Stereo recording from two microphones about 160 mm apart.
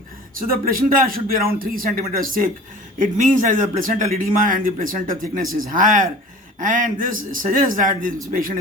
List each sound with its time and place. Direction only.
0.3 s a man's voice: 60° right (ahead or behind)